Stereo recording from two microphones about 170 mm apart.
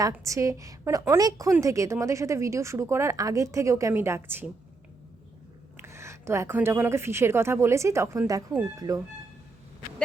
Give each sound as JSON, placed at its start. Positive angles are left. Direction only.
{"t": 0.0, "sound": "a woman's voice", "side_deg": -20}
{"t": 5.7, "sound": "speech", "side_deg": -15}